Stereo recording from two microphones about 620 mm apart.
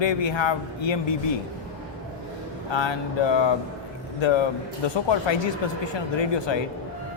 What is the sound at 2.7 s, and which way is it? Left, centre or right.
Speech, left.